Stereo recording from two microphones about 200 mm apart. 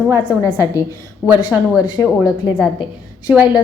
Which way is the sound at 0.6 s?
15° left (ahead or behind).